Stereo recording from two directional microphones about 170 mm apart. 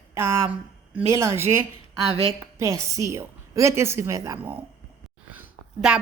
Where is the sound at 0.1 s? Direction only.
15° right (ahead or behind).